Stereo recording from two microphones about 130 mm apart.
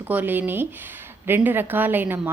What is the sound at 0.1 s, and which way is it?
A woman's voice, 15° right (ahead or behind).